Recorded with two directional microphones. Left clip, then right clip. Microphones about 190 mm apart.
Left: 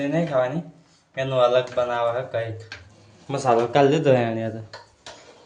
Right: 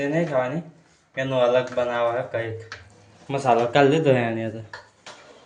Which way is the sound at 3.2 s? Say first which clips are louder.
Even; 15° left (ahead or behind).